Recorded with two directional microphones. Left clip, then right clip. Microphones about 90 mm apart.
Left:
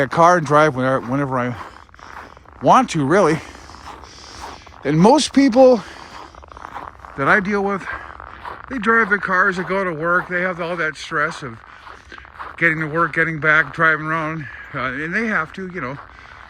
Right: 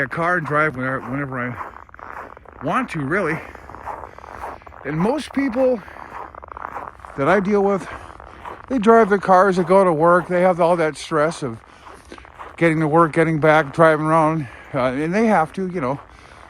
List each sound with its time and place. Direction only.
0.0 s speech: 45° left (ahead or behind)
2.6 s speech: 40° left (ahead or behind)
4.8 s speech: 90° left
6.7 s a sound: 5° right (ahead or behind)
7.3 s speech: 15° right (ahead or behind); by 11.4 s 40° right (ahead or behind)
12.5 s speech: 40° right (ahead or behind)